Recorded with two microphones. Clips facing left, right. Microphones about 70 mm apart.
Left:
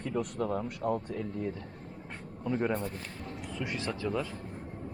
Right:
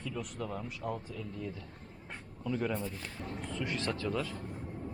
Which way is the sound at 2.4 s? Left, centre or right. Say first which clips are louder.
Left 3 dB; left.